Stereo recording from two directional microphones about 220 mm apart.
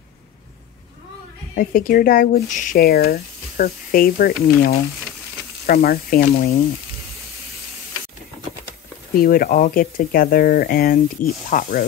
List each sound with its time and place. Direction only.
1.5 s speech: 40° left (ahead or behind)
9.2 s speech: 40° left (ahead or behind)